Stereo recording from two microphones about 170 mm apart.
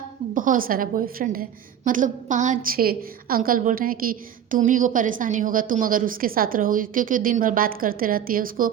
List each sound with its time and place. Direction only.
0.3 s a woman's voice: 55° right (ahead or behind)